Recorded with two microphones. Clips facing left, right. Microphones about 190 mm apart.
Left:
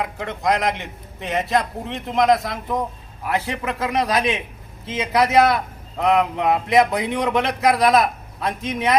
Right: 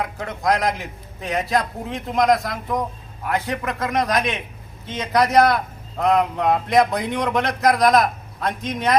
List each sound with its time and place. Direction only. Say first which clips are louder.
0.0 s a man's voice: even; centre (ahead or behind)